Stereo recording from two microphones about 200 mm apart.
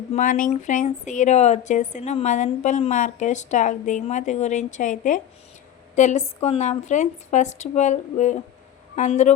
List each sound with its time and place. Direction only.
0.1 s a woman's voice: 40° left (ahead or behind)